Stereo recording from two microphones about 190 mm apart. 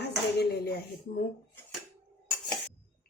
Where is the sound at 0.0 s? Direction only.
60° left (ahead or behind).